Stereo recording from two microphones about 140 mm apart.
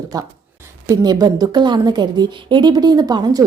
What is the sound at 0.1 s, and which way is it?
A woman's voice, 25° right (ahead or behind).